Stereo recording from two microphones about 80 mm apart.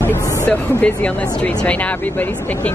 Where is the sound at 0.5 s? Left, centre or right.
Centre.